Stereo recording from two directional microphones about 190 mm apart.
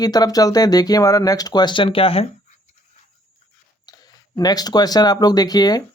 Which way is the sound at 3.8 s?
20° left (ahead or behind).